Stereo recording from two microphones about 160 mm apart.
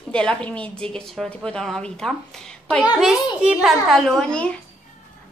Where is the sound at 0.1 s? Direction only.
5° left (ahead or behind).